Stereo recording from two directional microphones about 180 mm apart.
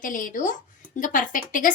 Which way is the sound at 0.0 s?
50° left (ahead or behind).